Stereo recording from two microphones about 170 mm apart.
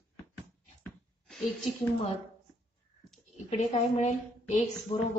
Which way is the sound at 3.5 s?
40° left (ahead or behind).